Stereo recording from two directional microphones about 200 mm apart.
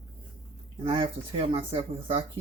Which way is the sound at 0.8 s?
25° right (ahead or behind).